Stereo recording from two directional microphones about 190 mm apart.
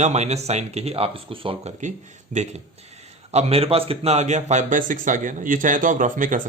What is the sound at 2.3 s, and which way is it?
Speech, 40° right (ahead or behind).